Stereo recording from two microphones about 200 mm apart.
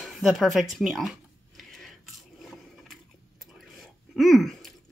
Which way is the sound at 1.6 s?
Centre (ahead or behind).